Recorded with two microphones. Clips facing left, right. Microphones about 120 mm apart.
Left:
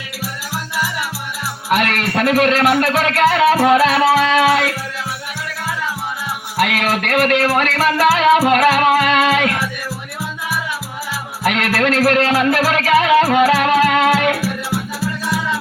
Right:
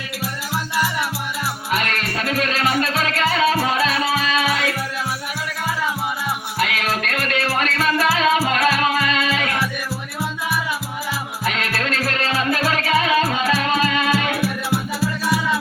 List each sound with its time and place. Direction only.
1.7 s music: 70° left (ahead or behind)
6.6 s music: 60° left (ahead or behind)
11.4 s music: 65° left (ahead or behind)